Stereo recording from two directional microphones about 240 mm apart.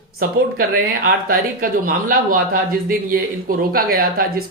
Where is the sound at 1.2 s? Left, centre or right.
Right.